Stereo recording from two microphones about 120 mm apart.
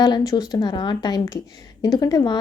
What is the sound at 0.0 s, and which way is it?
A woman's voice, 35° left (ahead or behind).